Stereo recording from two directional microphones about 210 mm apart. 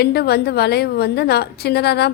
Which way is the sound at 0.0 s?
50° left (ahead or behind).